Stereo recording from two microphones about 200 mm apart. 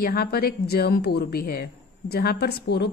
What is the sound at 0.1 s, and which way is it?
A woman's voice, 50° left (ahead or behind).